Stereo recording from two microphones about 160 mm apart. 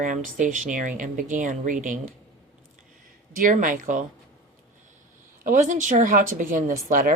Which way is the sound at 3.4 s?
55° right (ahead or behind).